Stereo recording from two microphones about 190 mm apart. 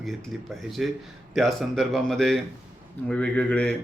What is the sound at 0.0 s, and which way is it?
Speech, centre (ahead or behind).